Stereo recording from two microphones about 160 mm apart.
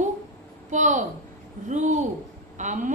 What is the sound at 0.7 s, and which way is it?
A woman's voice, 50° right (ahead or behind).